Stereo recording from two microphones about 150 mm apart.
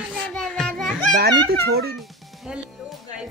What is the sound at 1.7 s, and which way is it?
Speech, 90° right.